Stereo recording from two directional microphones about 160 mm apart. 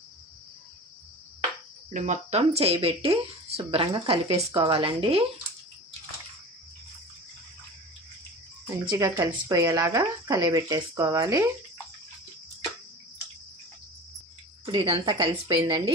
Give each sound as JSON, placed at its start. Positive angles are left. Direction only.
{"t": 1.9, "sound": "speech", "side_deg": -50}
{"t": 2.4, "sound": "speech", "side_deg": -40}
{"t": 8.9, "sound": "speech", "side_deg": -20}
{"t": 14.7, "sound": "speech", "side_deg": -25}